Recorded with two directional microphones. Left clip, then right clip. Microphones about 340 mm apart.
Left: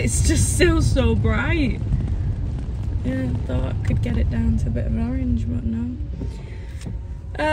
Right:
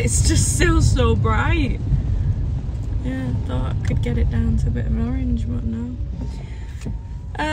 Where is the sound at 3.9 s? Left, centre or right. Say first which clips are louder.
Right 2 dB; centre.